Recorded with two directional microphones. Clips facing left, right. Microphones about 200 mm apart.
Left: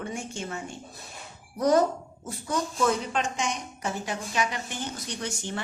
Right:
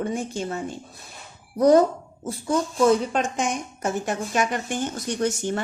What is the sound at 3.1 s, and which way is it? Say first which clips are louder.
A woman's voice: right 4 dB; 50° right (ahead or behind).